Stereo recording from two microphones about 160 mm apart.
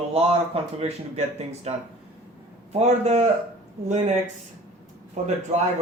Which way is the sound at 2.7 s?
45° right (ahead or behind).